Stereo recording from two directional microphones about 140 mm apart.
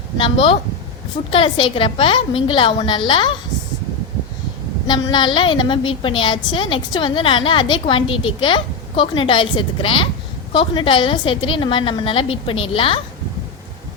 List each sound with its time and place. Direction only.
0.2 s a woman's voice: 40° left (ahead or behind)
4.9 s a woman's voice: 35° left (ahead or behind)